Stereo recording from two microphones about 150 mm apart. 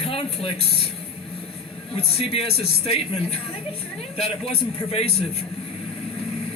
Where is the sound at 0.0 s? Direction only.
40° left (ahead or behind).